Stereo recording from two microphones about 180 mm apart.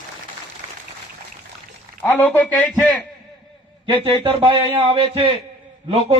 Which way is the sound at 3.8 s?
30° right (ahead or behind).